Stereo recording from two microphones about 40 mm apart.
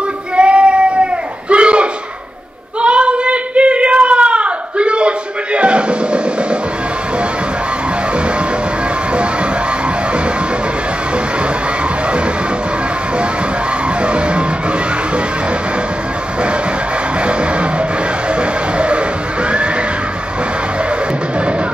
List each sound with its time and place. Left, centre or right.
0.4 s a sound: right
2.8 s child singing: right
9.1 s music: right
14.0 s music: right
17.2 s music: right